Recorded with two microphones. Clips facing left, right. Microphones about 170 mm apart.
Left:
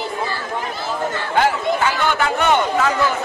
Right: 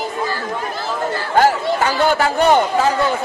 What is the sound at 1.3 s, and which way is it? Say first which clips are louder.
Chatter: right 3 dB; 40° right (ahead or behind).